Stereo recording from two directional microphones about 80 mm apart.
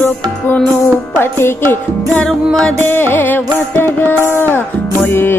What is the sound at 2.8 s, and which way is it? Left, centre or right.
Music, left.